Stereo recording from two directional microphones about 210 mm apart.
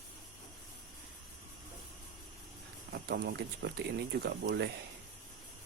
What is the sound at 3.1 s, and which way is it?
Speech, 50° right (ahead or behind).